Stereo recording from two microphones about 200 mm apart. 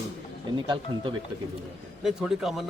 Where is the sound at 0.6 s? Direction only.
25° right (ahead or behind).